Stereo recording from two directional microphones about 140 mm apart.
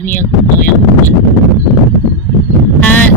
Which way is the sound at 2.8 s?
10° left (ahead or behind).